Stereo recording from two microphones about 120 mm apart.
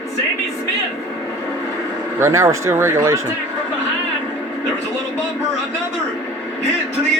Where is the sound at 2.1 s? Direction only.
20° right (ahead or behind).